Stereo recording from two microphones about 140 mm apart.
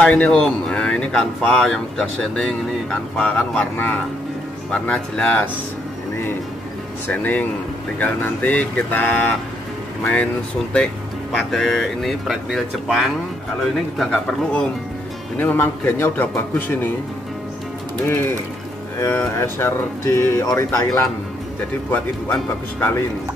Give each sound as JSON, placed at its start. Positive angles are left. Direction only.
{"t": 0.0, "sound": "speech", "side_deg": 10}
{"t": 7.1, "sound": "speech", "side_deg": 10}
{"t": 11.3, "sound": "speech", "side_deg": 0}
{"t": 18.0, "sound": "speech", "side_deg": 15}